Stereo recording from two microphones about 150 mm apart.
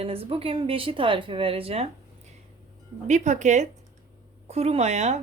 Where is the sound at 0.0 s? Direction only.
40° right (ahead or behind).